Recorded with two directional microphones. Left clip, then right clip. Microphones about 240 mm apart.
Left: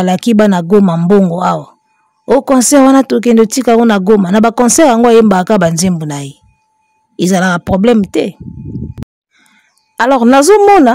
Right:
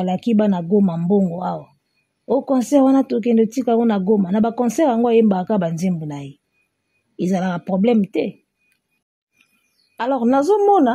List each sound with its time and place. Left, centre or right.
0.0 s speech: left
9.9 s speech: left